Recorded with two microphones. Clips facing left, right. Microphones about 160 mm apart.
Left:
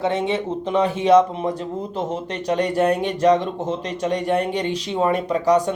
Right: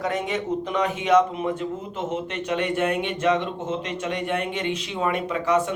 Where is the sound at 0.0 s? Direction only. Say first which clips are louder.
Left 4 dB; 30° left (ahead or behind).